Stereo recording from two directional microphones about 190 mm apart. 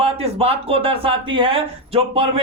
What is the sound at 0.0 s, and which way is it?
Speech, 30° right (ahead or behind).